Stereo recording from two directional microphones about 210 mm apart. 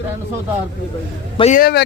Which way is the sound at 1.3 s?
30° left (ahead or behind).